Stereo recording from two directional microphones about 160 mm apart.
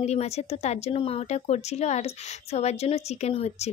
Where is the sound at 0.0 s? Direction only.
40° left (ahead or behind).